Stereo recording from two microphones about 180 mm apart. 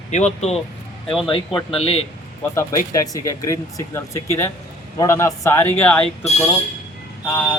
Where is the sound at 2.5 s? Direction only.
20° left (ahead or behind).